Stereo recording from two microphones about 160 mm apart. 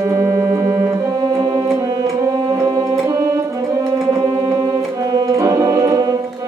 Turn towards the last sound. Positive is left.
turn(degrees=-25)  # may be behind; listen again after turning